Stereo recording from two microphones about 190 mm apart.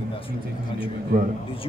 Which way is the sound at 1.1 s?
50° right (ahead or behind).